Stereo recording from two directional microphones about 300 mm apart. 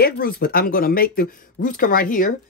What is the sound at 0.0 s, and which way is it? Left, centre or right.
Speech, left.